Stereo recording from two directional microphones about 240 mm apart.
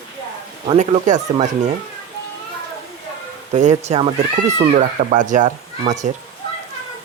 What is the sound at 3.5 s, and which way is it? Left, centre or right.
Speech, right.